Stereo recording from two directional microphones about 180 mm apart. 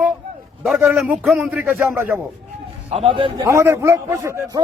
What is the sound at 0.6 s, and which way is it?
A man's voice, 5° right (ahead or behind).